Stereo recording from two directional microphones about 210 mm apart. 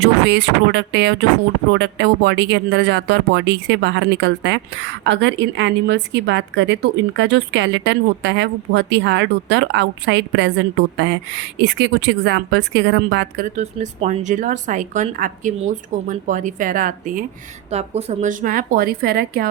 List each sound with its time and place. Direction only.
0.0 s speech: 55° right (ahead or behind)
11.5 s speech: 55° right (ahead or behind)
13.6 s a woman's voice: 35° right (ahead or behind)
17.7 s a woman's voice: 30° right (ahead or behind); by 19.5 s 45° right (ahead or behind)